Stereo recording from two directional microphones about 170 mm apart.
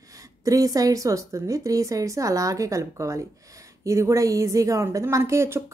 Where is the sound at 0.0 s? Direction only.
20° right (ahead or behind).